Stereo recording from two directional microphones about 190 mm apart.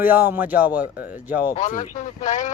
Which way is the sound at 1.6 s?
40° left (ahead or behind).